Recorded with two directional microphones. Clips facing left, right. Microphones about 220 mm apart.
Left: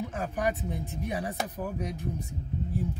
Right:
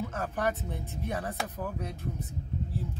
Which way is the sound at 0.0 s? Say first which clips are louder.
Left 1 dB; 15° left (ahead or behind).